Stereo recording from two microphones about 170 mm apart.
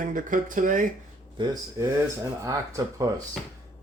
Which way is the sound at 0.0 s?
50° right (ahead or behind).